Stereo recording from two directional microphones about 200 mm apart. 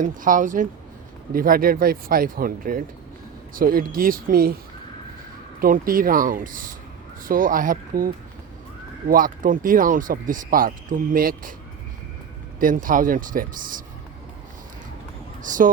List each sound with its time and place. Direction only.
0.0 s speech: 40° right (ahead or behind)
5.5 s speech: 45° right (ahead or behind)
12.5 s speech: 40° right (ahead or behind)
15.4 s speech: 40° right (ahead or behind)